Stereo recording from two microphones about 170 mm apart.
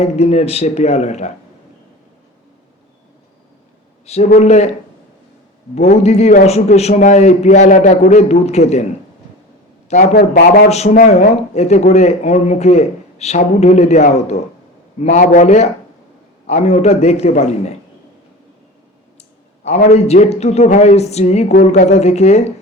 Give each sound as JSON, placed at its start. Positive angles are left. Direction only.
{"t": 0.0, "sound": "speech", "side_deg": 40}
{"t": 4.0, "sound": "a man's voice", "side_deg": 40}
{"t": 5.7, "sound": "speech", "side_deg": 40}
{"t": 9.9, "sound": "a man's voice", "side_deg": 45}
{"t": 10.2, "sound": "speech", "side_deg": 65}
{"t": 10.7, "sound": "a man's voice", "side_deg": 40}
{"t": 19.6, "sound": "a man's voice", "side_deg": 40}